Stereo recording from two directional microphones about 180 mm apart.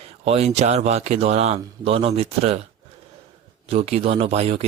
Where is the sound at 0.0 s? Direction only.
35° right (ahead or behind).